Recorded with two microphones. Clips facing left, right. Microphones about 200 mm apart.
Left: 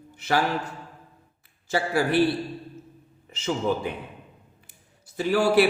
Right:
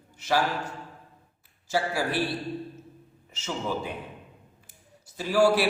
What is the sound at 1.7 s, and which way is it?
Speech, 60° left (ahead or behind).